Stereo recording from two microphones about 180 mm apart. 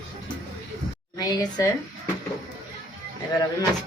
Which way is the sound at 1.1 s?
20° left (ahead or behind).